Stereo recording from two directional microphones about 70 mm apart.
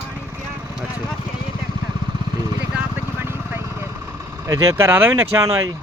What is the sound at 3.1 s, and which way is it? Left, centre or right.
Vehicle, right.